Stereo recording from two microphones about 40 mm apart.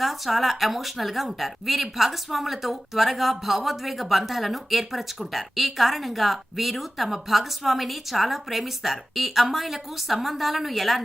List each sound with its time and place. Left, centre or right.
0.0 s speech: centre